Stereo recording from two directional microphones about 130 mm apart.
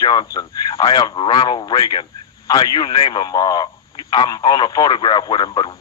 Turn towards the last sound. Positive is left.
turn(degrees=35)  # may be behind; listen again after turning